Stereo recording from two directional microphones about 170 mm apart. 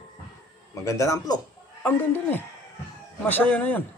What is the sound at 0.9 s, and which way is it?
A man's voice, 15° left (ahead or behind).